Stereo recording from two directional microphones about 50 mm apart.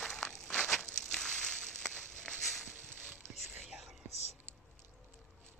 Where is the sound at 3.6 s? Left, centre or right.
Centre.